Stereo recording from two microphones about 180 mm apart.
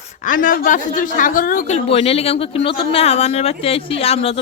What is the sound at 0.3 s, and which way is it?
Speech, 50° left (ahead or behind).